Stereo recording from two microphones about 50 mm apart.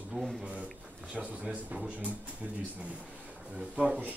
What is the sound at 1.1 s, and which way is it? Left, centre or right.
Speech, right.